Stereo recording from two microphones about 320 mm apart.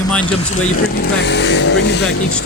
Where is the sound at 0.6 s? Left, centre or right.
Left.